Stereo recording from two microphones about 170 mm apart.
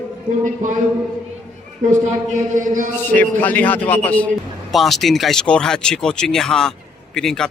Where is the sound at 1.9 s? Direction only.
45° right (ahead or behind).